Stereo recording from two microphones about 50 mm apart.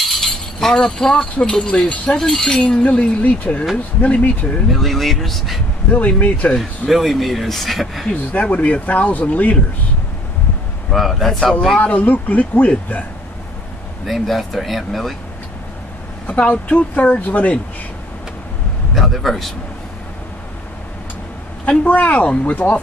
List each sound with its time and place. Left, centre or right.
0.1 s a sound: centre
1.4 s speech: centre
4.6 s speech: centre
5.9 s speech: left
6.5 s speech: centre
8.1 s speech: left
10.9 s speech: centre
11.8 s speech: left
14.0 s speech: centre
16.3 s speech: left
18.9 s speech: centre
21.6 s speech: left